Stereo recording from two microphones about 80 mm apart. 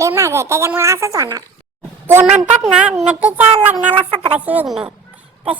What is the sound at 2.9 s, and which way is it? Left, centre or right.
Child singing, centre.